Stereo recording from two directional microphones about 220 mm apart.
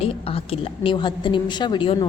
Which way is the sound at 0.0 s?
25° left (ahead or behind).